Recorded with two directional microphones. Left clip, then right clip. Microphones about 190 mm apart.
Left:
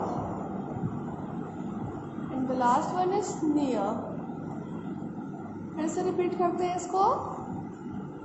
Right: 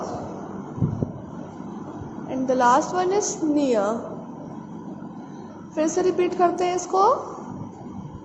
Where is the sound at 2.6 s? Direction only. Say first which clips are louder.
Right 6 dB; 35° right (ahead or behind).